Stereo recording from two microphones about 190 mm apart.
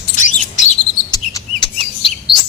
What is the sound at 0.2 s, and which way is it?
Bird, 40° left (ahead or behind).